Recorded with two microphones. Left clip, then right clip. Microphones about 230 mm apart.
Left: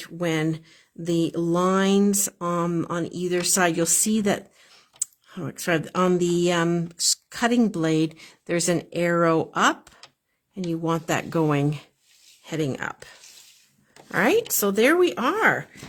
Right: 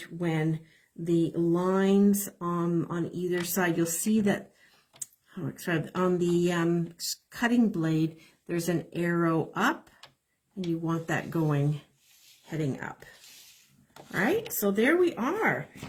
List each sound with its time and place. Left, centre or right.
0.0 s speech: left
10.8 s speech: left
14.1 s speech: left